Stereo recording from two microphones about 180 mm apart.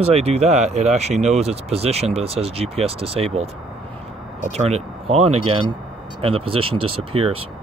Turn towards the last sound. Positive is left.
turn(degrees=-30)  # may be behind; listen again after turning